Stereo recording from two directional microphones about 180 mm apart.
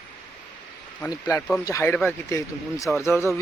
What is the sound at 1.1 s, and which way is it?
Speech, 15° left (ahead or behind).